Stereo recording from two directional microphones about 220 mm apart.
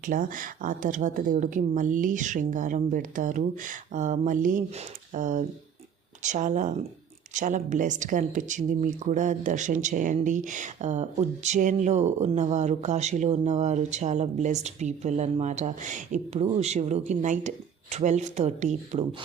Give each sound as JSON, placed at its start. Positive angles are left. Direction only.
{"t": 0.0, "sound": "speech", "side_deg": -35}